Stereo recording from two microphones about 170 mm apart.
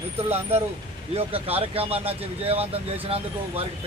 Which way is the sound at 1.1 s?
35° right (ahead or behind).